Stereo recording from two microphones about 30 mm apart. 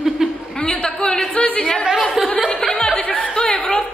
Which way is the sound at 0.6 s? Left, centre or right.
Left.